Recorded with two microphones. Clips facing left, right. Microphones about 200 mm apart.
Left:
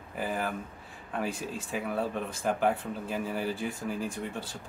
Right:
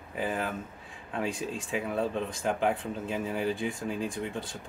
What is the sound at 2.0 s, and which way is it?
Speech, 20° right (ahead or behind).